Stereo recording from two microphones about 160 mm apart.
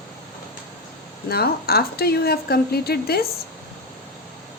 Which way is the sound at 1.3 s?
75° left (ahead or behind).